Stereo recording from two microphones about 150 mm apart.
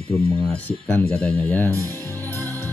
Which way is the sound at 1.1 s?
10° left (ahead or behind).